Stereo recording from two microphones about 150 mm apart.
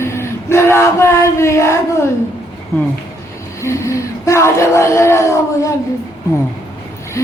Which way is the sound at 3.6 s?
20° left (ahead or behind).